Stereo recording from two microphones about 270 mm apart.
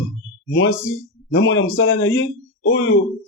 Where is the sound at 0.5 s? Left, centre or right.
Left.